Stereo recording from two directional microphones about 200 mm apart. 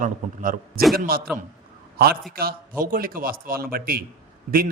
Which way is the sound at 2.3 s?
45° right (ahead or behind).